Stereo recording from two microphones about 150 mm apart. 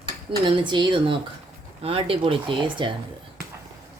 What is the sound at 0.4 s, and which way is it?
Speech, 35° right (ahead or behind).